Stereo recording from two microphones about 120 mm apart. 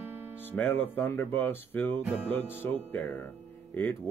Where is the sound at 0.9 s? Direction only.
15° left (ahead or behind).